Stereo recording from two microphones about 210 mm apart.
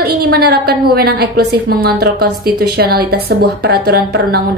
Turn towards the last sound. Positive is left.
turn(degrees=-50)  # may be behind; listen again after turning